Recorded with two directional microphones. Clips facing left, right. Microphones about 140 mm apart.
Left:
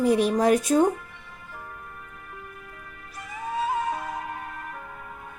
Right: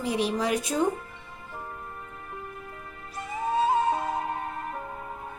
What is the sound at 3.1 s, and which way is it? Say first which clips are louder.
Music: right 4 dB; 25° right (ahead or behind).